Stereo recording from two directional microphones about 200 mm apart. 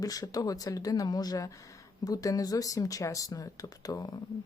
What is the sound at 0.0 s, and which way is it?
Speech, 20° left (ahead or behind).